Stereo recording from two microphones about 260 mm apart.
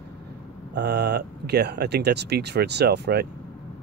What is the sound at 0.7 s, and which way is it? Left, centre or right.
Speech, right.